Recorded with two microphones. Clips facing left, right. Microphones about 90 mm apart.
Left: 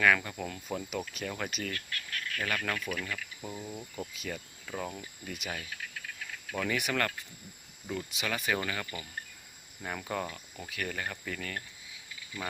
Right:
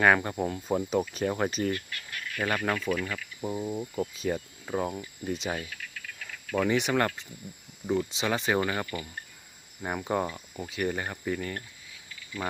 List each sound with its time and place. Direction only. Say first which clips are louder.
0.0 s speech: right 4 dB; 35° right (ahead or behind)
1.7 s speech: right 4 dB; 20° right (ahead or behind)